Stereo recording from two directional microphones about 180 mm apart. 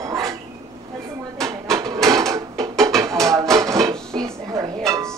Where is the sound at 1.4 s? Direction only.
20° right (ahead or behind).